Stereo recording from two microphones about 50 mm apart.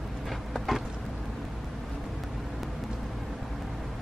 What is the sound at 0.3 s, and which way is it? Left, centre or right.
Vehicle, centre.